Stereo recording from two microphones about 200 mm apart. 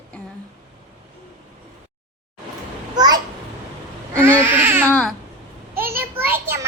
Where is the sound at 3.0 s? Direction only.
20° right (ahead or behind).